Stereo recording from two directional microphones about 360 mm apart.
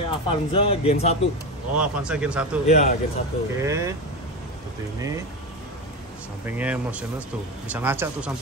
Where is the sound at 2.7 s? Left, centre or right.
Centre.